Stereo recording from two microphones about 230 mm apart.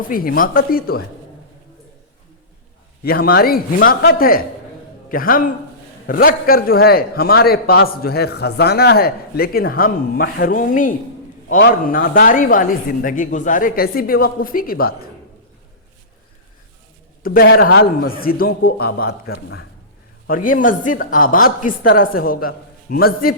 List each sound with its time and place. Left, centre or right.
0.1 s a man's voice: left
3.0 s a man's voice: left
17.2 s a man's voice: left